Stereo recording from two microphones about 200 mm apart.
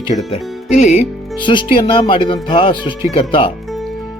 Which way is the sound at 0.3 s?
30° left (ahead or behind).